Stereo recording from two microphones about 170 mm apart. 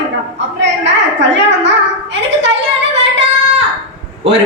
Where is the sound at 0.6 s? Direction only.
90° right.